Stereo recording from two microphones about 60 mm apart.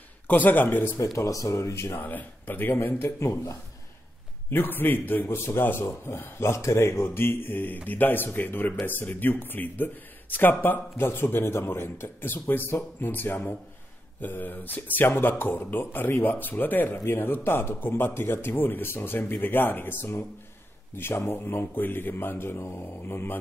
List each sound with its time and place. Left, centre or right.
0.3 s speech: left
1.1 s speech: left
2.0 s speech: left
3.2 s speech: left
4.5 s speech: left
23.0 s speech: left